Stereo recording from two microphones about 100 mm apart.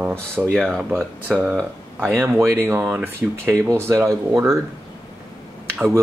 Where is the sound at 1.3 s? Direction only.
10° right (ahead or behind); by 4.6 s 30° right (ahead or behind).